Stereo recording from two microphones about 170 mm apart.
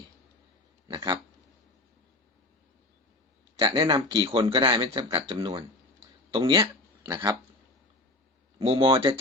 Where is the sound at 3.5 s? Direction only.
30° right (ahead or behind).